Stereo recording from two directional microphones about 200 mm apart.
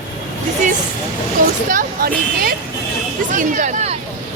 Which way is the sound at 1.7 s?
45° right (ahead or behind).